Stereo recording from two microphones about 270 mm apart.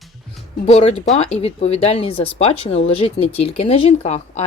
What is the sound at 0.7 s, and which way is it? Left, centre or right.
Speech, left.